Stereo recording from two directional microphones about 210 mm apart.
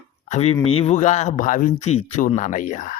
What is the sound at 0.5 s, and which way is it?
Speech, 25° left (ahead or behind).